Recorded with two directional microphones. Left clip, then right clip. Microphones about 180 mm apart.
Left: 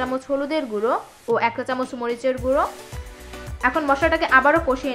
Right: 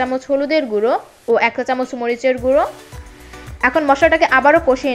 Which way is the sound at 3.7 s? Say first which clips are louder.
Right 8 dB; 20° right (ahead or behind).